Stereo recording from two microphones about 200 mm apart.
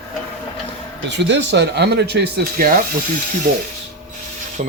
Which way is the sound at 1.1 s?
60° right (ahead or behind).